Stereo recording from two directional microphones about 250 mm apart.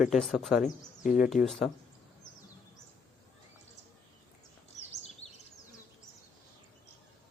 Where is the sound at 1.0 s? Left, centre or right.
Left.